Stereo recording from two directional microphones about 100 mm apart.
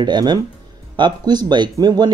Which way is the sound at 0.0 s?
45° right (ahead or behind).